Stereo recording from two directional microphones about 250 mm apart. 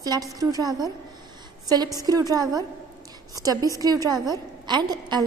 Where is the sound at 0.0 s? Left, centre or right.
Centre.